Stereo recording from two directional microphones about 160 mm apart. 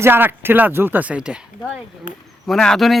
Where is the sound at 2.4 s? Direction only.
5° left (ahead or behind).